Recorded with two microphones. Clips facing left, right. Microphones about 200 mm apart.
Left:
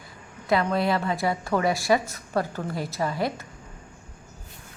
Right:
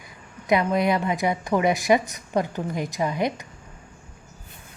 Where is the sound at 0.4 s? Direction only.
15° right (ahead or behind).